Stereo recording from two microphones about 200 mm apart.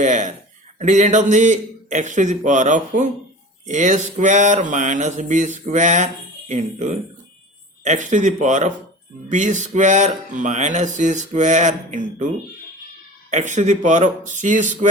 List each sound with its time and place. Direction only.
0.0 s speech: 40° right (ahead or behind)
13.3 s speech: 35° right (ahead or behind)